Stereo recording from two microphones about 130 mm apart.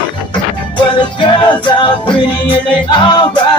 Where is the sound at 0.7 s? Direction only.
35° left (ahead or behind).